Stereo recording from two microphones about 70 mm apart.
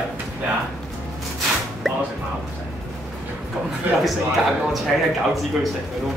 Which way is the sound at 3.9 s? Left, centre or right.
Right.